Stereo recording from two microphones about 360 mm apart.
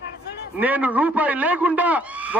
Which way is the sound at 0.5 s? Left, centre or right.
Centre.